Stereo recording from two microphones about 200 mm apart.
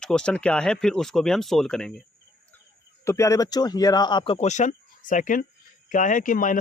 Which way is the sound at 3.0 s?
15° left (ahead or behind).